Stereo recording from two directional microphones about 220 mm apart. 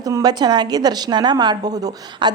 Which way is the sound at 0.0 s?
15° right (ahead or behind).